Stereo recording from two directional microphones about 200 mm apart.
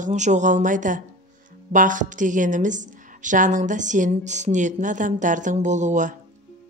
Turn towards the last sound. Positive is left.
turn(degrees=-40)  # may be behind; listen again after turning